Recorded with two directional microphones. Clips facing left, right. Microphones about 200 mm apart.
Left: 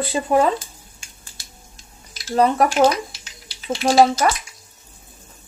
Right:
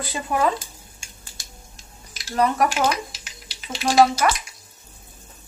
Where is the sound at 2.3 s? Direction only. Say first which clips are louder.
Left 4 dB; 30° left (ahead or behind).